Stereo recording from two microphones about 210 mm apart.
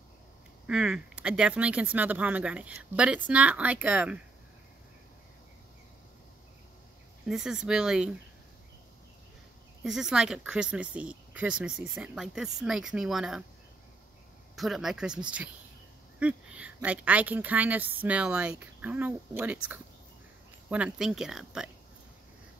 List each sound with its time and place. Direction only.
0.7 s a woman's voice: 5° right (ahead or behind)
7.2 s speech: centre (ahead or behind)
9.8 s speech: centre (ahead or behind)
14.5 s a woman's voice: centre (ahead or behind)